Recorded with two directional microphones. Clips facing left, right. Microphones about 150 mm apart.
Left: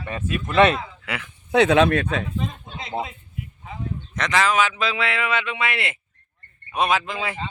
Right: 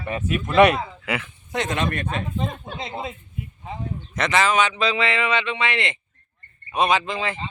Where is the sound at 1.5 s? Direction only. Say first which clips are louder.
Left 9 dB; 70° left (ahead or behind).